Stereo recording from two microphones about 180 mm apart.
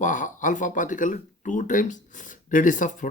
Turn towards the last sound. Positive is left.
turn(degrees=45)  # may be behind; listen again after turning